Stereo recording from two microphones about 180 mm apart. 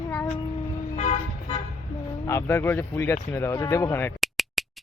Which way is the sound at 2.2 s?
15° left (ahead or behind).